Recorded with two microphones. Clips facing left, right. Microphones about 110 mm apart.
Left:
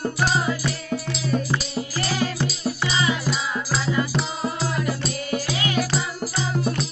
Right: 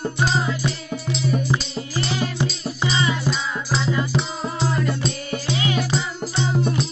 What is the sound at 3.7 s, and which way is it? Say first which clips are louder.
Music: right 2 dB; 5° left (ahead or behind).